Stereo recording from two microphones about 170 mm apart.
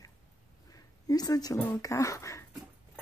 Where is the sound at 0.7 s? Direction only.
20° left (ahead or behind).